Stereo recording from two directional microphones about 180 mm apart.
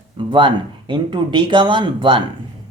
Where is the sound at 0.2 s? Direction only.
25° right (ahead or behind).